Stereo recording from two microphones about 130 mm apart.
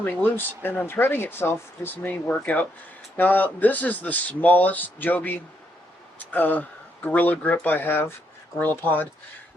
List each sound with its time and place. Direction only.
0.0 s speech: 15° left (ahead or behind)